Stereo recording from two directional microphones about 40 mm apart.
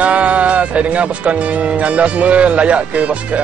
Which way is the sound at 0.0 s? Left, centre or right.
Right.